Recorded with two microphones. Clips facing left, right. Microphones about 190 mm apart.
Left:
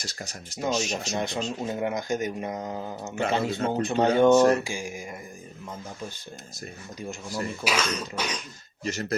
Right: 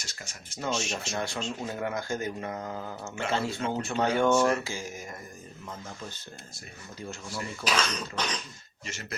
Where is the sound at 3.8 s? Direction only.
20° left (ahead or behind).